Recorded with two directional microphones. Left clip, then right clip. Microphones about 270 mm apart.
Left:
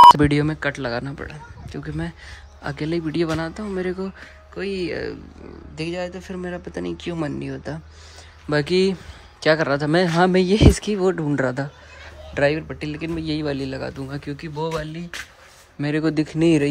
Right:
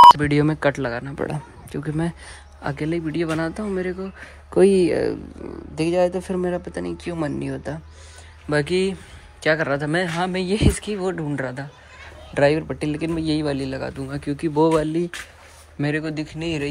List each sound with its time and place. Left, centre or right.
0.2 s speech: centre
1.2 s speech: centre
4.6 s speech: centre
16.0 s speech: left